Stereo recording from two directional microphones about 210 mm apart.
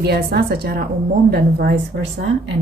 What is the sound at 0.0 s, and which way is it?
A woman's voice, 50° right (ahead or behind).